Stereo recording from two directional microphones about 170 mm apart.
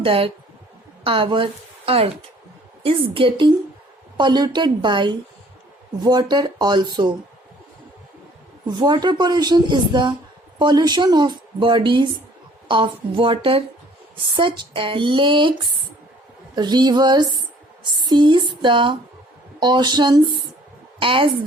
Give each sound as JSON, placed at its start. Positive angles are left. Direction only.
{"t": 0.0, "sound": "a woman's voice", "side_deg": -30}
{"t": 8.6, "sound": "a woman's voice", "side_deg": -25}